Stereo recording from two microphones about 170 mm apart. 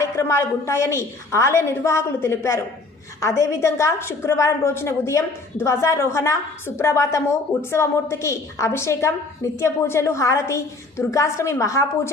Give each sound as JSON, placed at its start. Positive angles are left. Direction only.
{"t": 0.0, "sound": "a woman's voice", "side_deg": 15}